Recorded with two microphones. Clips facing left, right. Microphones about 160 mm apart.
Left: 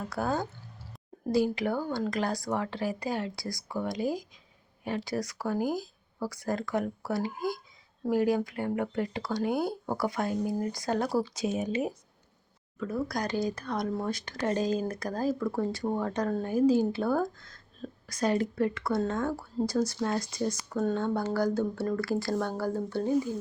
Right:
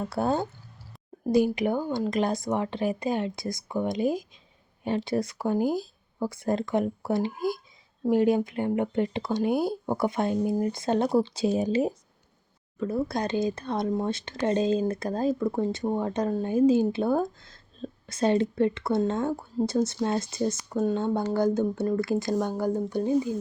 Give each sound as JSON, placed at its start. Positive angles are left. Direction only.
{"t": 0.0, "sound": "speech", "side_deg": -25}
{"t": 5.6, "sound": "speech", "side_deg": 15}
{"t": 6.1, "sound": "speech", "side_deg": -25}